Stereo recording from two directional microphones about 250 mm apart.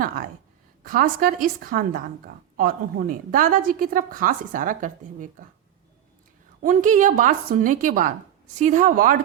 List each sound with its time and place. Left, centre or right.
0.9 s a woman's voice: right
6.6 s a woman's voice: right